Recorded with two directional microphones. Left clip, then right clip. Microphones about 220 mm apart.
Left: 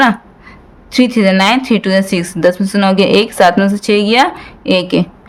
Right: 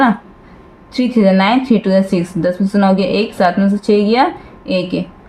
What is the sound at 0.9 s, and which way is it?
Speech, 35° left (ahead or behind).